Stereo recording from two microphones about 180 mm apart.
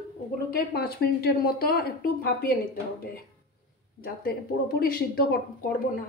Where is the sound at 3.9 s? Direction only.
55° left (ahead or behind).